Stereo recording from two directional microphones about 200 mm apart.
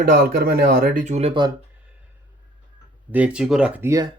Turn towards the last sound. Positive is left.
turn(degrees=-15)  # may be behind; listen again after turning